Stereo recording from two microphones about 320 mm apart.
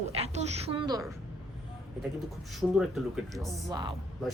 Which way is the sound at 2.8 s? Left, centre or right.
Centre.